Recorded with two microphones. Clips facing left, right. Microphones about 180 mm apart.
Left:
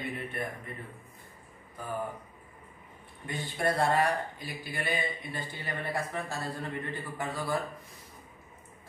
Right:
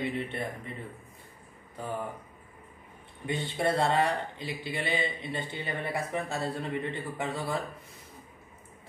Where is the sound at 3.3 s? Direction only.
25° right (ahead or behind).